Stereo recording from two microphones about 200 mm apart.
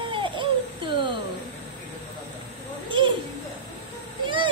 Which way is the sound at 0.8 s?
25° right (ahead or behind).